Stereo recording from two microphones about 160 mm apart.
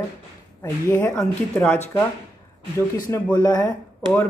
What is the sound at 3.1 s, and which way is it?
Speech, 20° left (ahead or behind).